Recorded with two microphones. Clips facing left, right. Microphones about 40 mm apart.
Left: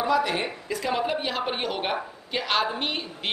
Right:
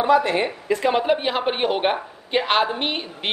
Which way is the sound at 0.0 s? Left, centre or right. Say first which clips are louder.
Right 6 dB; right.